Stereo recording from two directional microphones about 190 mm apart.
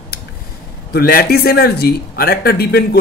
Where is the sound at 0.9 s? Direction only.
55° left (ahead or behind).